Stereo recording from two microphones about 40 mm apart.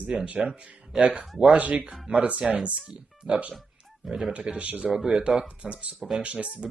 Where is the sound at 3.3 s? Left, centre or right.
Right.